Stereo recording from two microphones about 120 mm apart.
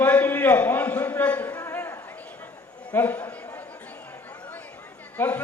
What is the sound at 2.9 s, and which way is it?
Speech, 15° left (ahead or behind).